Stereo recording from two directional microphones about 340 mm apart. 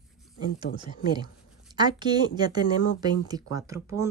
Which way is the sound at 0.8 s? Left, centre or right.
Centre.